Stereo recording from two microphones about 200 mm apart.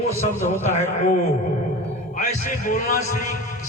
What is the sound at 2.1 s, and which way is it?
A man's voice, 40° left (ahead or behind).